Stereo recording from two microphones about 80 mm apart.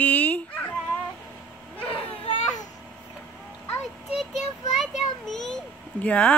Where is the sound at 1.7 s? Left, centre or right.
Centre.